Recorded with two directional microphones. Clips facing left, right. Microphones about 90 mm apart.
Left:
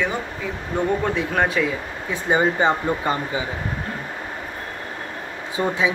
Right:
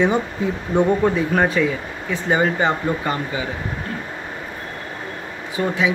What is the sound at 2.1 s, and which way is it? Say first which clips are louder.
Speech: right 1 dB; 20° left (ahead or behind).